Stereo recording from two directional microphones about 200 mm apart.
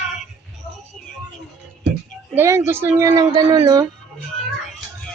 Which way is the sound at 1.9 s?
55° right (ahead or behind).